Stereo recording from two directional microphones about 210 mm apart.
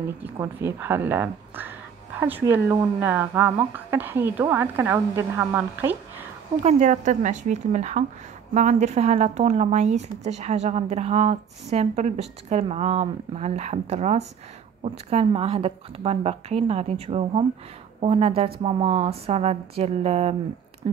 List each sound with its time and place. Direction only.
0.2 s a woman's voice: 10° right (ahead or behind)
6.6 s a woman's voice: 35° right (ahead or behind)